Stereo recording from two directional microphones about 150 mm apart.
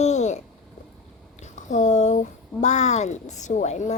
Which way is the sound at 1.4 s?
55° left (ahead or behind).